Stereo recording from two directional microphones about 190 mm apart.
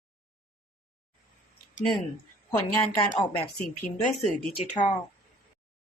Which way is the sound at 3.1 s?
25° left (ahead or behind).